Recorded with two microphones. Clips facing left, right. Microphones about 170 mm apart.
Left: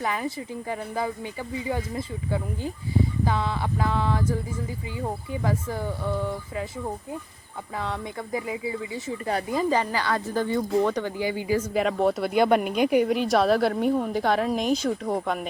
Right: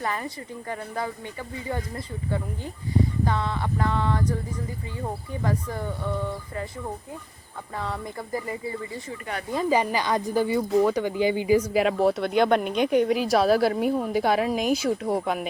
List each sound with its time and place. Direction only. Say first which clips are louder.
0.0 s speech: left 2 dB; 5° left (ahead or behind)
3.2 s speech: left 1 dB; 5° left (ahead or behind)
9.6 s speech: right 5 dB; 15° right (ahead or behind)
11.1 s speech: right 4 dB; 20° right (ahead or behind)
11.7 s speech: right 1 dB; 5° right (ahead or behind)